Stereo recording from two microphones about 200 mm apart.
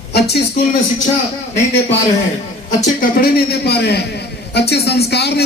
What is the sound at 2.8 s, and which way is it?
A man's voice, 50° left (ahead or behind).